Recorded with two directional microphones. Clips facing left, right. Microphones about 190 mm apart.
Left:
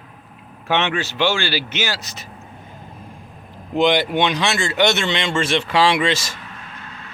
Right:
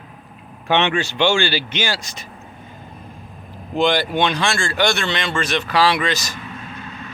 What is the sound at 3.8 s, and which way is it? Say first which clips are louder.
A man's voice: left 1 dB; 20° left (ahead or behind).